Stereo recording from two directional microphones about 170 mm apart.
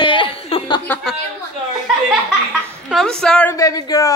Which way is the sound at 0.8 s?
10° left (ahead or behind).